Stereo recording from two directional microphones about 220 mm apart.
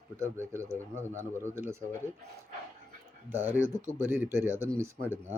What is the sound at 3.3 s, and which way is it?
A man's voice, 10° right (ahead or behind).